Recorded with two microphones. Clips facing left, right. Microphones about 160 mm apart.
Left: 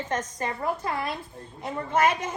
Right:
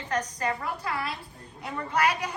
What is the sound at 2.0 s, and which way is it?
Speech, 20° left (ahead or behind).